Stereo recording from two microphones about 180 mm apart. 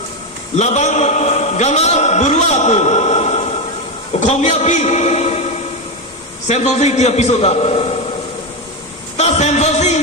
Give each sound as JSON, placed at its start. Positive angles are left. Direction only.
{"t": 0.5, "sound": "a man's voice", "side_deg": 40}
{"t": 6.5, "sound": "a man's voice", "side_deg": 40}
{"t": 9.1, "sound": "music", "side_deg": 40}